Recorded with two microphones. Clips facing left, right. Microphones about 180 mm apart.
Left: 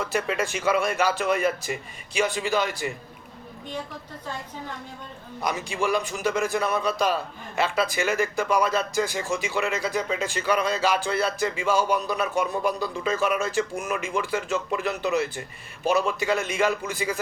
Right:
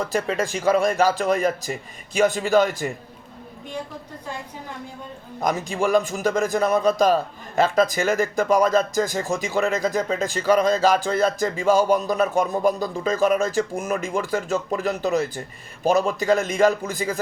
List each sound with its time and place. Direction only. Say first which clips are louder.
0.0 s speech: right 3 dB; 35° right (ahead or behind)
5.4 s a man's voice: right 4 dB; 45° right (ahead or behind)